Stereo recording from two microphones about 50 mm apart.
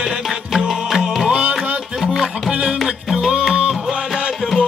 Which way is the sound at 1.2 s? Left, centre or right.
Right.